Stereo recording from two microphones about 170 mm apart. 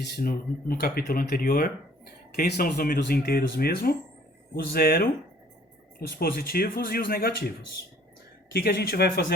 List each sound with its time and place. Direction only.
0.0 s speech: 60° left (ahead or behind)
8.5 s speech: 65° left (ahead or behind)